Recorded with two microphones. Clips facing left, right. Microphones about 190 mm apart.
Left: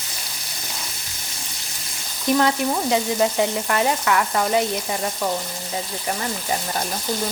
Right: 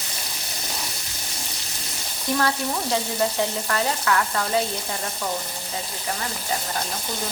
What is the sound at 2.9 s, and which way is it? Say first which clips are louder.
Frying: left 3 dB; 15° left (ahead or behind).